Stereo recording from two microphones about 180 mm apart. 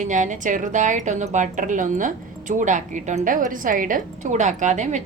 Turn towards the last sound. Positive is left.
turn(degrees=-40)  # may be behind; listen again after turning